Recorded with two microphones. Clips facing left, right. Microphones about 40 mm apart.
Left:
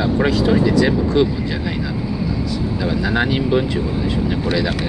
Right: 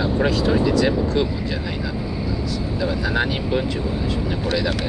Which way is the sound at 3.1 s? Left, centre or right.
Left.